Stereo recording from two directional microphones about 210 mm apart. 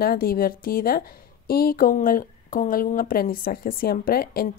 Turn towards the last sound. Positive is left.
turn(degrees=45)  # may be behind; listen again after turning